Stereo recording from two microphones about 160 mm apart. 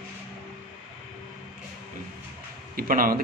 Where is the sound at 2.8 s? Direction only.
65° right (ahead or behind).